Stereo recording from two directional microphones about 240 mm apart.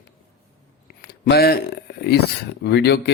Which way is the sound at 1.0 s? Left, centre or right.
Left.